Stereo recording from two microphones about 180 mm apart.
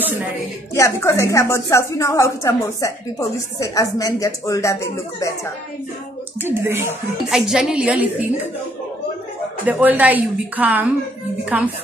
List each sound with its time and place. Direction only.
0.7 s a woman's voice: 15° left (ahead or behind)
6.4 s a woman's voice: 15° right (ahead or behind)
7.2 s a woman's voice: centre (ahead or behind)
9.7 s a woman's voice: 10° right (ahead or behind)